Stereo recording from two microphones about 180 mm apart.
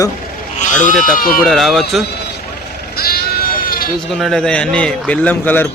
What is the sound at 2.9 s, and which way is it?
Sheep, 55° left (ahead or behind).